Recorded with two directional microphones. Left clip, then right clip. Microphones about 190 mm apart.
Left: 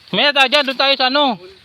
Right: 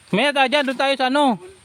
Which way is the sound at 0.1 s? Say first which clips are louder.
Left 4 dB; 35° right (ahead or behind).